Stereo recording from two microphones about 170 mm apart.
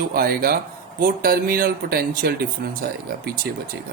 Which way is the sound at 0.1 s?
60° right (ahead or behind).